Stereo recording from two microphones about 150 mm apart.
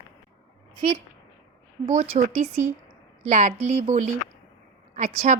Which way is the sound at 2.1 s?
45° right (ahead or behind).